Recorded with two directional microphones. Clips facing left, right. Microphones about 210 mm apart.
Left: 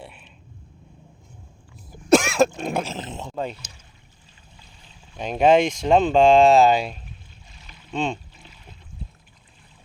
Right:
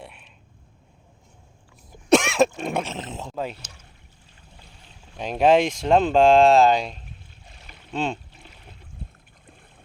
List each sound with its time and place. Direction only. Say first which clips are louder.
0.0 s a sound: left 1 dB; centre (ahead or behind)
1.9 s cough: left 1 dB; centre (ahead or behind)
2.6 s speech: left 1 dB; centre (ahead or behind)
4.5 s boat: right 2 dB; 60° right (ahead or behind)
5.1 s speech: left 1 dB; centre (ahead or behind)
7.9 s speech: left 1 dB; 5° right (ahead or behind)
8.4 s a sound: even; 60° right (ahead or behind)